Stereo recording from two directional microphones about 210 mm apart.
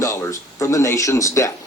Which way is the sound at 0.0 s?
15° left (ahead or behind).